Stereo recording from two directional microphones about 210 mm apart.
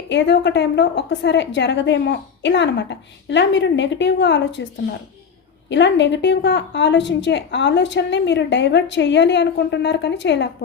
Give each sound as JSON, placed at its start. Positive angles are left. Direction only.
{"t": 0.1, "sound": "a woman's voice", "side_deg": 55}
{"t": 5.6, "sound": "a woman's voice", "side_deg": 55}